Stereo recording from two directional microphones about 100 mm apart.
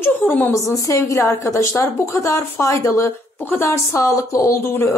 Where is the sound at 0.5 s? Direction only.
30° left (ahead or behind).